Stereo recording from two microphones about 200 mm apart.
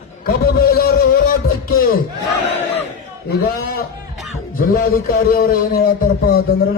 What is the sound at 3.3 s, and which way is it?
A man's voice, 50° left (ahead or behind).